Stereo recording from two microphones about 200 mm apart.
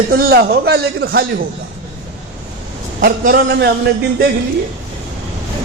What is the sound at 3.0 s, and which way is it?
Speech, 50° right (ahead or behind).